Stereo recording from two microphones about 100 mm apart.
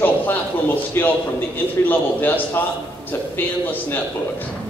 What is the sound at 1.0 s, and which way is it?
A man's voice, 25° left (ahead or behind).